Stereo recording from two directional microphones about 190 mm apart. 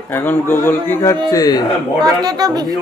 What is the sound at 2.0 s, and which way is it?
Speech, 20° right (ahead or behind).